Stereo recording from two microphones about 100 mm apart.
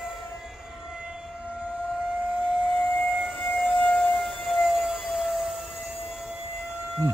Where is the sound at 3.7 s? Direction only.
15° left (ahead or behind).